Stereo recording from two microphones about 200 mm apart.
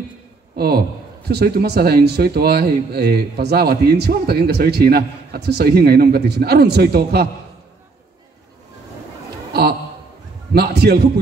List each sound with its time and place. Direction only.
0.6 s a man's voice: 50° right (ahead or behind)
9.5 s a sound: 55° right (ahead or behind)
10.5 s a man's voice: 55° right (ahead or behind)